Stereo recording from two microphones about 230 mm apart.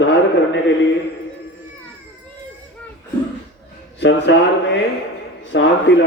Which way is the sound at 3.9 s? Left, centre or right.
Left.